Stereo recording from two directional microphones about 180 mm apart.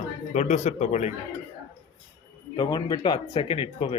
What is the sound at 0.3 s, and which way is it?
Speech, 40° left (ahead or behind).